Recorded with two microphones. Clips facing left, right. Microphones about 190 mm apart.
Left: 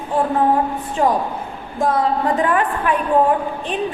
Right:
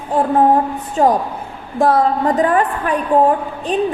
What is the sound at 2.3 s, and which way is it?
Speech, 40° right (ahead or behind).